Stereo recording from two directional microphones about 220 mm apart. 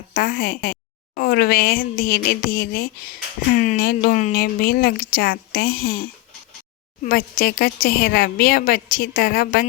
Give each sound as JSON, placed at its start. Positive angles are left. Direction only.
{"t": 0.1, "sound": "a woman's voice", "side_deg": 40}